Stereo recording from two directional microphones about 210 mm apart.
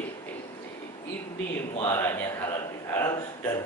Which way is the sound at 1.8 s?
10° left (ahead or behind).